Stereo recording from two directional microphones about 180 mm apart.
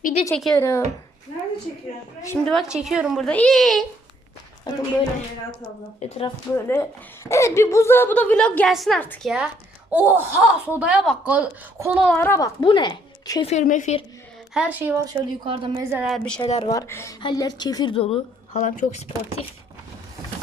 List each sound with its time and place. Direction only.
0.0 s a sound: 35° left (ahead or behind)
0.3 s a woman's voice: centre (ahead or behind)
0.6 s a woman's voice: 15° left (ahead or behind)
2.2 s a woman's voice: 10° left (ahead or behind)
6.0 s a woman's voice: 35° left (ahead or behind)
6.5 s a woman's voice: 15° left (ahead or behind)
9.9 s speech: 10° right (ahead or behind)
12.0 s a woman's voice: 10° left (ahead or behind)
13.4 s a woman's voice: 40° left (ahead or behind)
14.5 s speech: 5° right (ahead or behind)
15.0 s a woman's voice: 30° right (ahead or behind)
15.7 s speech: 15° right (ahead or behind)
16.0 s a woman's voice: 5° left (ahead or behind)
16.6 s a woman's voice: 15° left (ahead or behind); by 19.0 s 40° left (ahead or behind)